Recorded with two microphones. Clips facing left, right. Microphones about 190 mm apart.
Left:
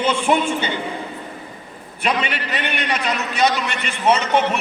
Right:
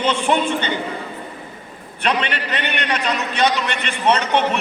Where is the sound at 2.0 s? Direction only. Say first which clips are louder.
Right 1 dB; 10° left (ahead or behind).